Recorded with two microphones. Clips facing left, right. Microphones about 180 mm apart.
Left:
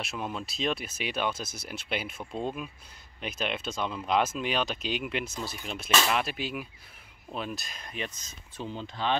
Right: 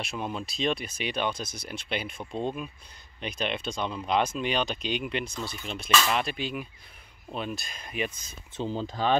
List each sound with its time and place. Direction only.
0.0 s speech: centre (ahead or behind)
8.1 s speech: 55° right (ahead or behind)
8.5 s speech: 35° right (ahead or behind)